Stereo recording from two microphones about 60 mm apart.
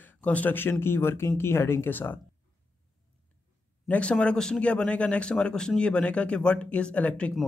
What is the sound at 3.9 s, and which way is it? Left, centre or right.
A man's voice, centre.